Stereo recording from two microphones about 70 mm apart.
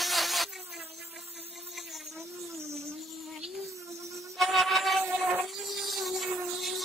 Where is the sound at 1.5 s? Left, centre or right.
Centre.